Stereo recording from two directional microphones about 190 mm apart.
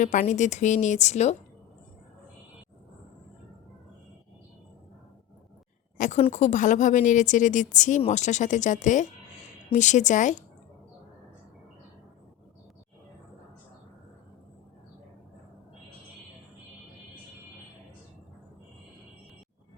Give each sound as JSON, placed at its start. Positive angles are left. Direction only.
{"t": 0.0, "sound": "speech", "side_deg": 40}
{"t": 6.0, "sound": "speech", "side_deg": 35}